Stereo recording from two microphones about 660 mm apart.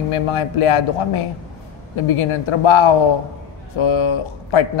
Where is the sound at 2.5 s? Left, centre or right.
Left.